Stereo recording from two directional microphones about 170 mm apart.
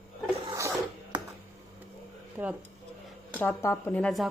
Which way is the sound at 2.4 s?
10° right (ahead or behind).